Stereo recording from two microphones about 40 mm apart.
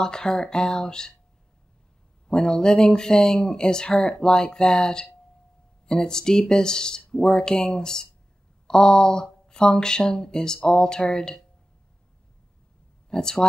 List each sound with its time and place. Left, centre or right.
0.0 s speech: centre
2.2 s speech: centre
13.1 s speech: centre